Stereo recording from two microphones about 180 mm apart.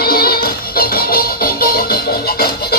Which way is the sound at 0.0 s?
55° left (ahead or behind).